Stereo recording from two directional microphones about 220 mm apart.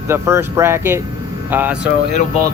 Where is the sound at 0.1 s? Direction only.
10° right (ahead or behind).